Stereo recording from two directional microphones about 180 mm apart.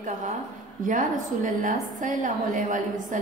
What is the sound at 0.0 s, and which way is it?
A woman's voice, 45° right (ahead or behind).